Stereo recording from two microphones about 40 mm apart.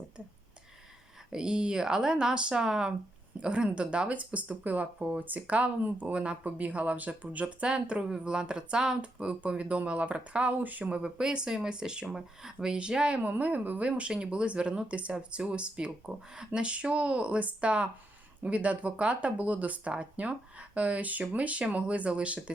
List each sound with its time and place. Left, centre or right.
1.3 s speech: centre; by 7.4 s right
7.4 s speech: right
10.6 s a woman's voice: right
10.9 s speech: right
12.5 s speech: right
13.2 s a woman's voice: right
13.8 s speech: right
16.6 s speech: right